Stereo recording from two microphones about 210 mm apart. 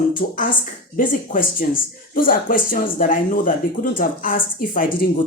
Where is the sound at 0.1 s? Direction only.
40° left (ahead or behind).